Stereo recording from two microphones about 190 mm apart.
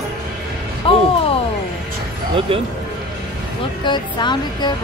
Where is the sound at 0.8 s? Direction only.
30° left (ahead or behind).